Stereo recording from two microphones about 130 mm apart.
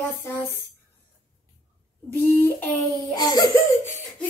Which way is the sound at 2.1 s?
15° left (ahead or behind).